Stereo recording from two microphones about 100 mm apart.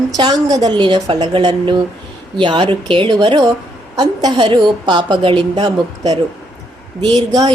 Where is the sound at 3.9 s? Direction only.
40° right (ahead or behind); by 5.7 s 55° right (ahead or behind).